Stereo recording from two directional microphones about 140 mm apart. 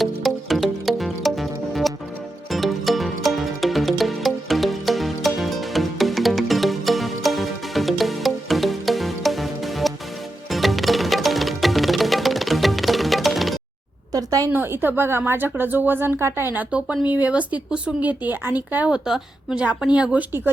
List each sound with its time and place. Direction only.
0.0 s music: centre (ahead or behind)
14.1 s a sound: 25° right (ahead or behind)
14.5 s speech: 15° right (ahead or behind)